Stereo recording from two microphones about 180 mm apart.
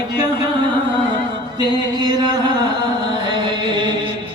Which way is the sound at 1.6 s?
25° right (ahead or behind).